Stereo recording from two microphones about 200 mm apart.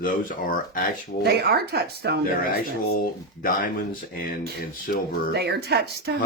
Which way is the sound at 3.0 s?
45° left (ahead or behind).